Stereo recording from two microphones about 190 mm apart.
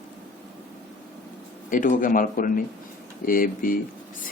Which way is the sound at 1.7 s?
45° left (ahead or behind).